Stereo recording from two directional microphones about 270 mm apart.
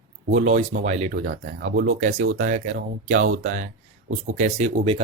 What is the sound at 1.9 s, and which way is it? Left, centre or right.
Speech, right.